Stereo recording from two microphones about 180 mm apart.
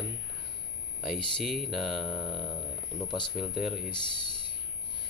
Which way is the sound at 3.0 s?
25° left (ahead or behind).